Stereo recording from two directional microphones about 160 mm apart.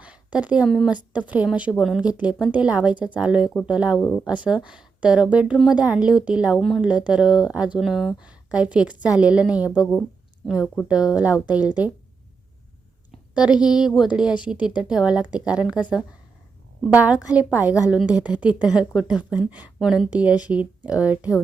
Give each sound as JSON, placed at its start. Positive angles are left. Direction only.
{"t": 0.0, "sound": "a woman's voice", "side_deg": -5}
{"t": 3.9, "sound": "speech", "side_deg": 15}
{"t": 4.4, "sound": "a woman's voice", "side_deg": -5}
{"t": 13.1, "sound": "a woman's voice", "side_deg": -5}